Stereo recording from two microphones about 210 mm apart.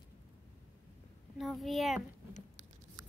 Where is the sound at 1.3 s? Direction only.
Centre (ahead or behind).